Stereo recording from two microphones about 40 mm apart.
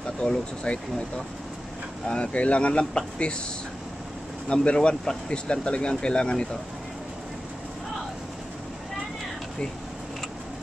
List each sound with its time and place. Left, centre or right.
0.7 s speech: left
4.5 s speech: left